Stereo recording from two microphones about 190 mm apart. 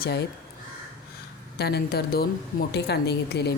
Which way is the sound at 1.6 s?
55° left (ahead or behind).